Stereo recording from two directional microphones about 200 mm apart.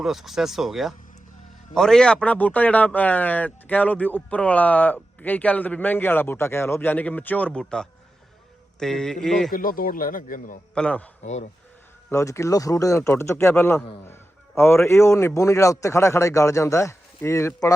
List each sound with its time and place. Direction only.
0.0 s a man's voice: centre (ahead or behind)
9.5 s speech: 45° left (ahead or behind)
10.8 s a man's voice: 5° left (ahead or behind)
11.2 s speech: 35° left (ahead or behind)
12.1 s a man's voice: 15° left (ahead or behind)